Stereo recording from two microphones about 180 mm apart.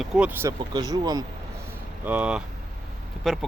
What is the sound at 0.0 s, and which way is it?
Speech, 5° right (ahead or behind).